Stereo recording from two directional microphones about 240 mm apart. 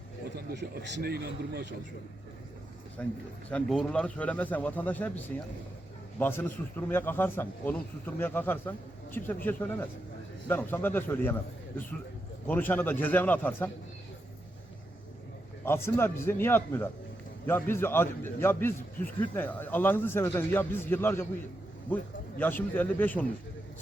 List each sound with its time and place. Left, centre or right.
0.3 s a man's voice: right
3.0 s speech: centre
15.6 s speech: centre